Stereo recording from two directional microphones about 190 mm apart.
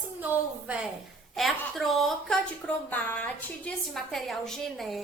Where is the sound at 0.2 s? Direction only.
10° right (ahead or behind).